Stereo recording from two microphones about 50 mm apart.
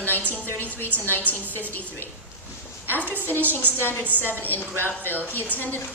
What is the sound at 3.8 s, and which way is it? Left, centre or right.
Speech, left.